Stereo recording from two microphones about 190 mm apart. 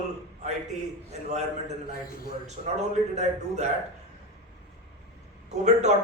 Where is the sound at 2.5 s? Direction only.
35° right (ahead or behind).